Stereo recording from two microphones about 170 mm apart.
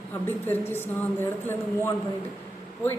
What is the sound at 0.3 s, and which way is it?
A man's voice, 10° left (ahead or behind).